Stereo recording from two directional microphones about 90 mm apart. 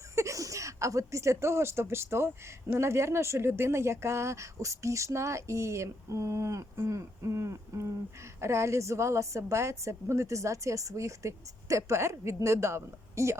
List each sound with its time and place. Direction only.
0.2 s speech: 35° right (ahead or behind)